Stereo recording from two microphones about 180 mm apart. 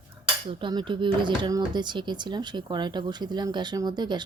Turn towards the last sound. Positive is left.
turn(degrees=-25)  # may be behind; listen again after turning